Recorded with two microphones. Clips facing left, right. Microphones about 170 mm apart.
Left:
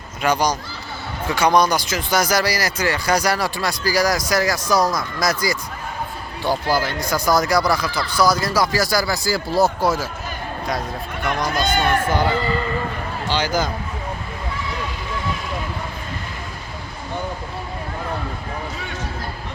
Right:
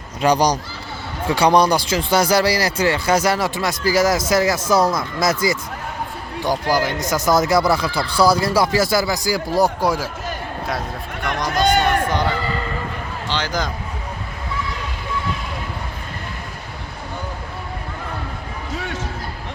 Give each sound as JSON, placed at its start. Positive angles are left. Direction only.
{"t": 0.2, "sound": "speech", "side_deg": -35}
{"t": 11.2, "sound": "speech", "side_deg": 5}